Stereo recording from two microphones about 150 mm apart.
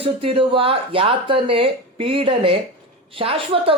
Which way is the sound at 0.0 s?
40° right (ahead or behind).